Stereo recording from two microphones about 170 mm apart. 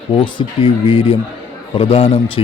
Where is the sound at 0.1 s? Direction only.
30° left (ahead or behind).